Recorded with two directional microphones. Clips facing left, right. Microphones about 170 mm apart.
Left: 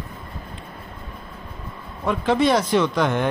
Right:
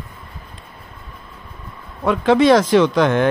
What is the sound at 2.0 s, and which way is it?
Speech, 90° right.